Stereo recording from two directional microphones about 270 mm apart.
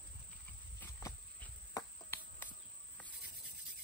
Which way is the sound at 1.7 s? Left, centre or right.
Centre.